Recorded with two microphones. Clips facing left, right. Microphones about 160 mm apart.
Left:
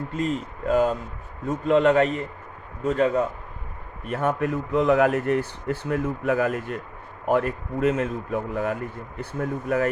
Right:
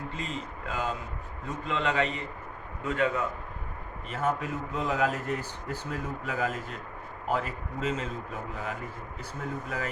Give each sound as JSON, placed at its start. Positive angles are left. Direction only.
{"t": 0.1, "sound": "speech", "side_deg": 45}
{"t": 4.0, "sound": "speech", "side_deg": 65}